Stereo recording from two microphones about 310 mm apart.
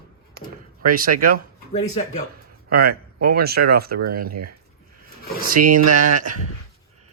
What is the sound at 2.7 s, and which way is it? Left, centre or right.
Speech, right.